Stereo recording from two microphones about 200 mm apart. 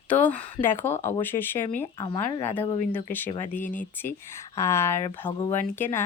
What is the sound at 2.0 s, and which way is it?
Speech, 25° left (ahead or behind).